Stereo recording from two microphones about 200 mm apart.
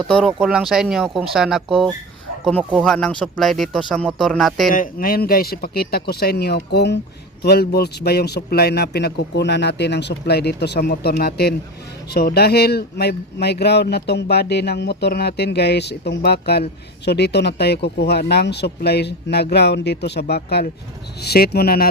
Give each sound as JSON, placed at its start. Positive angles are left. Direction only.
{"t": 0.1, "sound": "speech", "side_deg": 0}
{"t": 4.7, "sound": "speech", "side_deg": 45}